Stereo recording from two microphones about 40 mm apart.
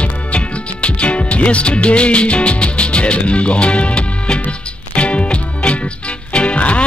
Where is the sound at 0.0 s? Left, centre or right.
Left.